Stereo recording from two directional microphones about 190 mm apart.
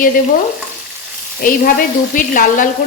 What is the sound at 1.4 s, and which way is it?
Speech, 50° left (ahead or behind).